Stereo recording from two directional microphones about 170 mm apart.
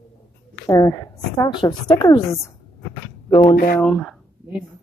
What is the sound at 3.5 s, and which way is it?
Speech, 60° left (ahead or behind).